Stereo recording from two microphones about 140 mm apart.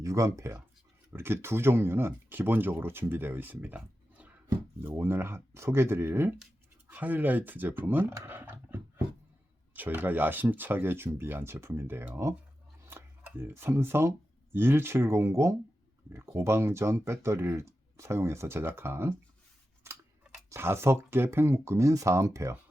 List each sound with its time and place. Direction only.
0.0 s speech: 20° right (ahead or behind)
9.7 s speech: 15° right (ahead or behind)
19.9 s scissors: 20° right (ahead or behind)
20.5 s speech: 15° right (ahead or behind)